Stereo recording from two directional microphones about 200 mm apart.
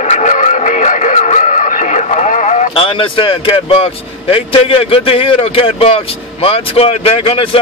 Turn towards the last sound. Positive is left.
turn(degrees=30)  # may be behind; listen again after turning